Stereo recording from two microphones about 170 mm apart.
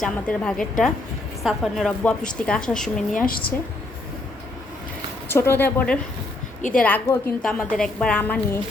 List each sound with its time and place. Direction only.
0.0 s speech: 5° left (ahead or behind)
5.3 s a woman's voice: 15° left (ahead or behind)
6.6 s a woman's voice: 50° left (ahead or behind)
6.8 s a woman's voice: 10° left (ahead or behind)